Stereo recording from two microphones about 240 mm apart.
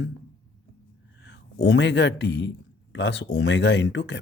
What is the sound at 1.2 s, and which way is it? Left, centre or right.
Speech, left.